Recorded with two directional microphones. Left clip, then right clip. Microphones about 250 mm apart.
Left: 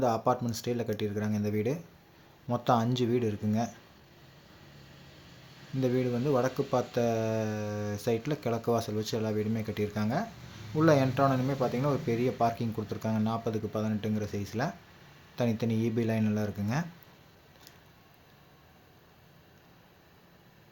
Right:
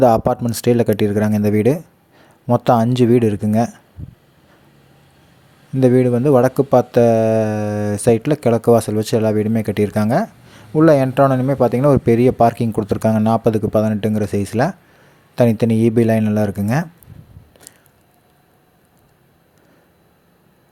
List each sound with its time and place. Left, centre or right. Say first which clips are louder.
0.0 s speech: right 14 dB; right
5.8 s speech: right 16 dB; right